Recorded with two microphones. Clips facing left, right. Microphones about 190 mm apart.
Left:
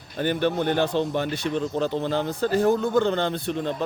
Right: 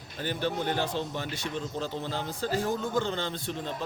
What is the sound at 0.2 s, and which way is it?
Speech, 65° left (ahead or behind).